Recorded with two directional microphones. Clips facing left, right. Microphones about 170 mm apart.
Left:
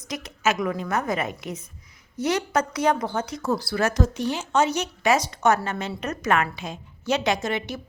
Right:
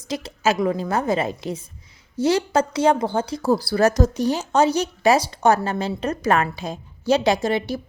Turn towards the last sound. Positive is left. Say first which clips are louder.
# right 5 dB
turn(degrees=-35)  # may be behind; listen again after turning